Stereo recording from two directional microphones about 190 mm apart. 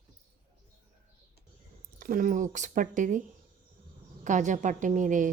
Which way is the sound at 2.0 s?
45° right (ahead or behind).